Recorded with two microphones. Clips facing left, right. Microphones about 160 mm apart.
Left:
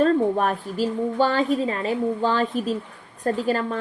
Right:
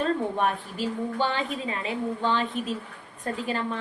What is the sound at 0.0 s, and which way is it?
A woman's voice, 40° left (ahead or behind).